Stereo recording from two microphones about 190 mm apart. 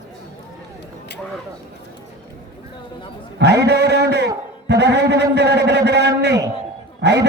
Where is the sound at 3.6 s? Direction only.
60° right (ahead or behind).